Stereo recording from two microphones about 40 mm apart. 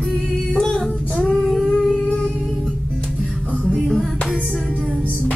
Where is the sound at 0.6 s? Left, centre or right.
Left.